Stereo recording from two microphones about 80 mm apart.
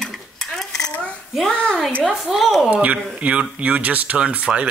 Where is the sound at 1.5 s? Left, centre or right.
Centre.